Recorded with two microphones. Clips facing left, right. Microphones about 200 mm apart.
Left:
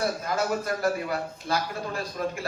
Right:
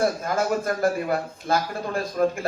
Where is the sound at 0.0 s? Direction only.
50° right (ahead or behind).